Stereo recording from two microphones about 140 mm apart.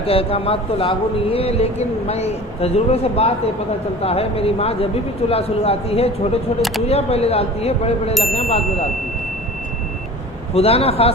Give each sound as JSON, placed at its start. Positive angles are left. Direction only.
{"t": 0.0, "sound": "speech", "side_deg": 45}
{"t": 10.5, "sound": "speech", "side_deg": 45}